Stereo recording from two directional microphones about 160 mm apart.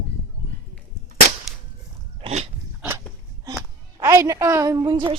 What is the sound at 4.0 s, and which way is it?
A woman's voice, 20° right (ahead or behind).